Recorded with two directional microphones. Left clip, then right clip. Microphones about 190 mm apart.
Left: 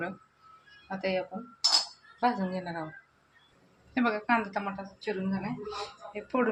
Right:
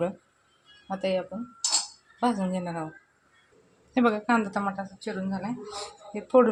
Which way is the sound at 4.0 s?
45° right (ahead or behind).